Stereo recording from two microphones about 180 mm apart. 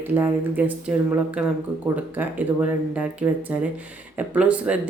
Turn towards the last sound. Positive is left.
turn(degrees=-5)  # may be behind; listen again after turning